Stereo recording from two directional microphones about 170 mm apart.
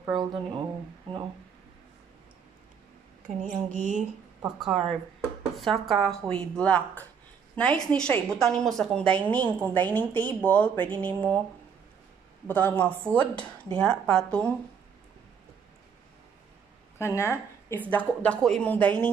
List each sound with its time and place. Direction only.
0.1 s speech: 25° right (ahead or behind)
3.4 s speech: 50° right (ahead or behind)
4.4 s a woman's voice: centre (ahead or behind)
12.4 s a woman's voice: 10° left (ahead or behind)
17.0 s a woman's voice: 15° left (ahead or behind)